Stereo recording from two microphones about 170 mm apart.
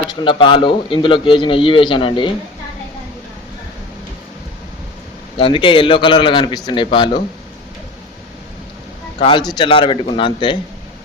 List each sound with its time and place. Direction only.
0.1 s a man's voice: 30° left (ahead or behind)
5.4 s a man's voice: 30° left (ahead or behind)
9.1 s speech: 30° left (ahead or behind)